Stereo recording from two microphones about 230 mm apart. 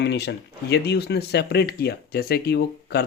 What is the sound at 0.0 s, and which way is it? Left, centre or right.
Speech, left.